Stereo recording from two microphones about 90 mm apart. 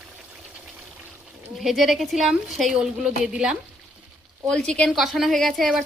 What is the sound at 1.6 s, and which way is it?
A woman's voice, centre (ahead or behind).